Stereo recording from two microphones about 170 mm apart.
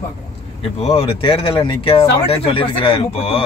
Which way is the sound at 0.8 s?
35° left (ahead or behind).